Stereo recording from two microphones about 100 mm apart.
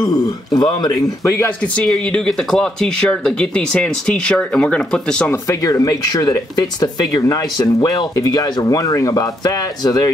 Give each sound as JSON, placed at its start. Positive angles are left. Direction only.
{"t": 0.0, "sound": "speech", "side_deg": 35}
{"t": 1.2, "sound": "speech", "side_deg": 25}
{"t": 1.6, "sound": "speech", "side_deg": 10}
{"t": 5.5, "sound": "speech", "side_deg": 35}